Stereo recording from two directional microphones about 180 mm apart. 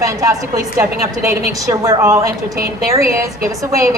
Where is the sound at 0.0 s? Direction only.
15° right (ahead or behind).